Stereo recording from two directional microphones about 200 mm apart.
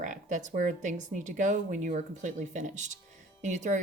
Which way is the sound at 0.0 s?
40° right (ahead or behind).